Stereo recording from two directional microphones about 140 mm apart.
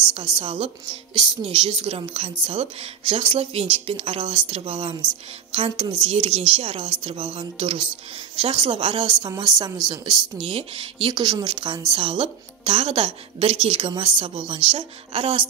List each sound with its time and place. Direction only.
0.1 s a woman's voice: 40° right (ahead or behind)
10.4 s a woman's voice: 45° right (ahead or behind)